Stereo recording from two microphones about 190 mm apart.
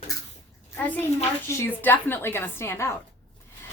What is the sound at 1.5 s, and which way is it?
Speech, 10° left (ahead or behind).